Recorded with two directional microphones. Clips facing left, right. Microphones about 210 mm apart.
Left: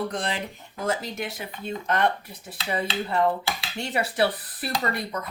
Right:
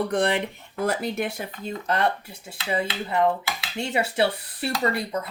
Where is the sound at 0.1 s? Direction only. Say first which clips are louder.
Right 7 dB; 60° right (ahead or behind).